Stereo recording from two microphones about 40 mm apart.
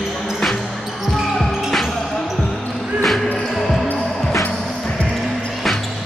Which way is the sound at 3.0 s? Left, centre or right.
Centre.